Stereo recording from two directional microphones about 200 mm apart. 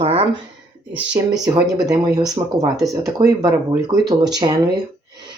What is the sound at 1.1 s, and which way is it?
Speech, 20° right (ahead or behind).